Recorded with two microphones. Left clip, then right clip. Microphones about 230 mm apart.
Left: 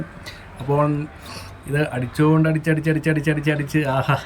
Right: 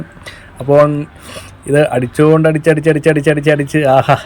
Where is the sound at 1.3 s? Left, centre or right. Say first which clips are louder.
Right 13 dB; centre.